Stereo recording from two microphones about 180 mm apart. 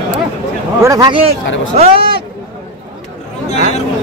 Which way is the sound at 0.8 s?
20° right (ahead or behind).